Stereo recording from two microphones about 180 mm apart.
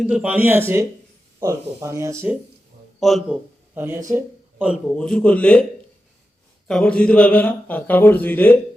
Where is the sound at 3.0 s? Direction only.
5° right (ahead or behind).